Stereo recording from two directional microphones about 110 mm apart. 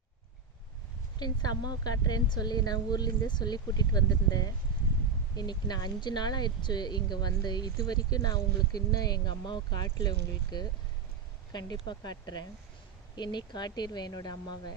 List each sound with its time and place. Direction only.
1.2 s speech: 40° left (ahead or behind)